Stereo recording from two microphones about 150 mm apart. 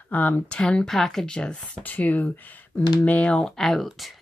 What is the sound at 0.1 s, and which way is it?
Speech, 10° left (ahead or behind).